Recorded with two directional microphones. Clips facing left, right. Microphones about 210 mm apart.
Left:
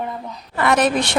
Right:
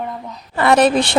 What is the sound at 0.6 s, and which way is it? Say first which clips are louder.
Speech: right 4 dB; 30° right (ahead or behind).